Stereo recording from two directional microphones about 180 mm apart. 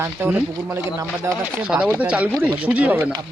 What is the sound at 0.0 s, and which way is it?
Speech, 10° right (ahead or behind).